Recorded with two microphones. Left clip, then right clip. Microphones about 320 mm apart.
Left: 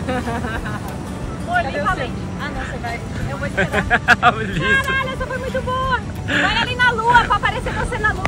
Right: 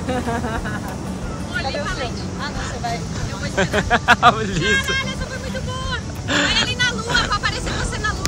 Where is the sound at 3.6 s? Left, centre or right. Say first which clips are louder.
Even; centre.